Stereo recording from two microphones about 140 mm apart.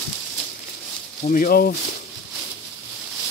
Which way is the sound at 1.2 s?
75° left (ahead or behind).